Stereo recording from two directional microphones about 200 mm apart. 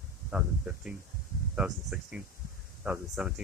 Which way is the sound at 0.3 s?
5° right (ahead or behind).